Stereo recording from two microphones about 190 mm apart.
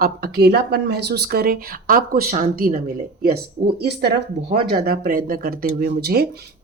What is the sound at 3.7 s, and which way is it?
Speech, 60° right (ahead or behind).